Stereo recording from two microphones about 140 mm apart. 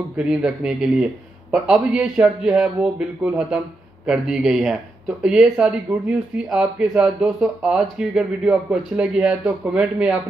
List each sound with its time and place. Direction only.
0.2 s a man's voice: 5° right (ahead or behind)